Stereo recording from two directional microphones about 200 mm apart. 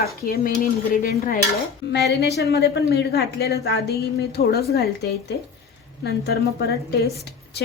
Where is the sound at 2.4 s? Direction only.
55° left (ahead or behind).